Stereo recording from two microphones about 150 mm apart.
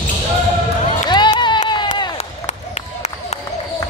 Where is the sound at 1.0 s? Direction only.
30° left (ahead or behind).